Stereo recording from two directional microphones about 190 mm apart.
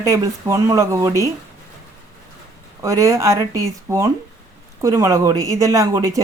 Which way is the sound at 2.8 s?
15° right (ahead or behind).